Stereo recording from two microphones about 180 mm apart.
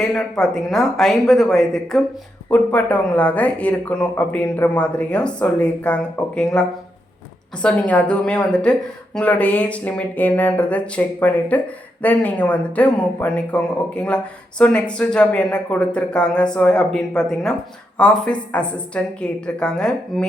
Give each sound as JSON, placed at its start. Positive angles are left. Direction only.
{"t": 0.0, "sound": "speech", "side_deg": 0}